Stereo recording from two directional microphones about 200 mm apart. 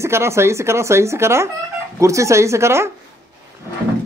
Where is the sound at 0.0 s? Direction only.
15° right (ahead or behind).